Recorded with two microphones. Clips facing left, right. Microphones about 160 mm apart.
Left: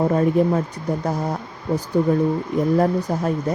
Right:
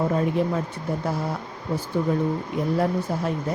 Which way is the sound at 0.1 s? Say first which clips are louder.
Left 5 dB; 40° left (ahead or behind).